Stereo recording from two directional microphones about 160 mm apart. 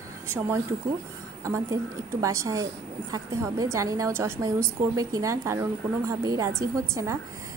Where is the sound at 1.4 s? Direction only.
20° right (ahead or behind).